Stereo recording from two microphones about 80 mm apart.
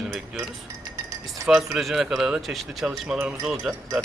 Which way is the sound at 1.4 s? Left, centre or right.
Centre.